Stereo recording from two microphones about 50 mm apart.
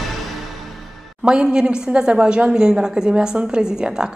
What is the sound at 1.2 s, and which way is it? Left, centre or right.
A woman's voice, centre.